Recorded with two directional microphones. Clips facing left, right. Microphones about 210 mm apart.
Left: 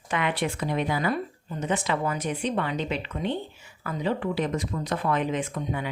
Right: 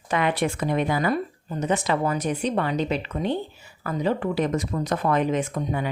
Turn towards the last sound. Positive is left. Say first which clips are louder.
# right 4 dB
turn(degrees=-40)  # may be behind; listen again after turning